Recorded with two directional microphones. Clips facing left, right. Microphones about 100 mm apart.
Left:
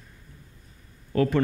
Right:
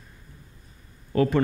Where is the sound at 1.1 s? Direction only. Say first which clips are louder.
Right 1 dB; 25° right (ahead or behind).